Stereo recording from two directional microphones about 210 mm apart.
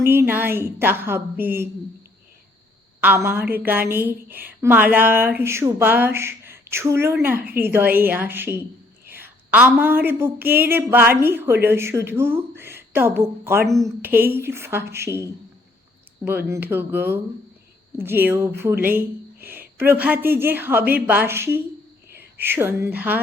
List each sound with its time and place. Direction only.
0.0 s a woman's voice: 10° right (ahead or behind)
3.0 s a woman's voice: 10° right (ahead or behind)